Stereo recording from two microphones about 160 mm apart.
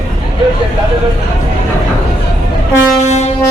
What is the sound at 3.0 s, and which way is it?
Train, 45° left (ahead or behind).